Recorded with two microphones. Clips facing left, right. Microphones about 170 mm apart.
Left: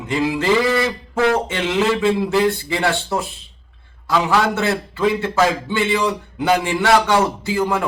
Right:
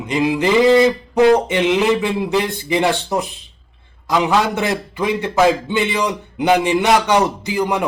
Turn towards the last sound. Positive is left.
turn(degrees=-20)  # may be behind; listen again after turning